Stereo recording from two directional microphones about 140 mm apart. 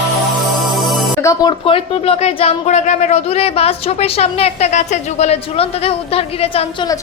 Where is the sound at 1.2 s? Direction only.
25° left (ahead or behind); by 6.8 s 45° left (ahead or behind).